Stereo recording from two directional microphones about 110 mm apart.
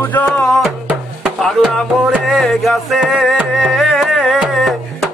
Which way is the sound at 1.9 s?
15° right (ahead or behind).